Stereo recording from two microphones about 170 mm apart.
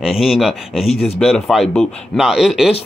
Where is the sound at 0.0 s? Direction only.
Centre (ahead or behind).